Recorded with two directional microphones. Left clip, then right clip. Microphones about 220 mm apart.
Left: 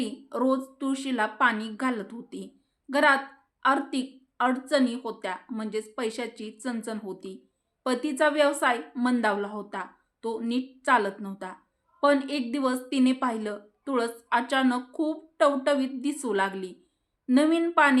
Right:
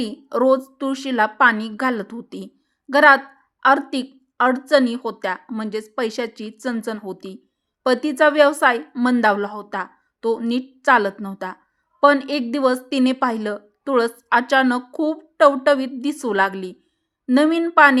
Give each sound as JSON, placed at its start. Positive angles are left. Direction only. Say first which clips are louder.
{"t": 0.0, "sound": "a woman's voice", "louder": "right 9 dB", "side_deg": -45}